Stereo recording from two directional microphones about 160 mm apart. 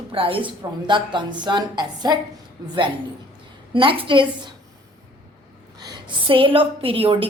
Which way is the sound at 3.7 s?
30° right (ahead or behind).